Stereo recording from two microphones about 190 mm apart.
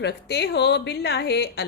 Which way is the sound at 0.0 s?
60° left (ahead or behind).